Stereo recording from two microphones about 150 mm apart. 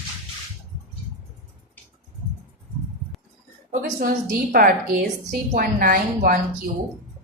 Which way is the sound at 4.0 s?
75° right (ahead or behind).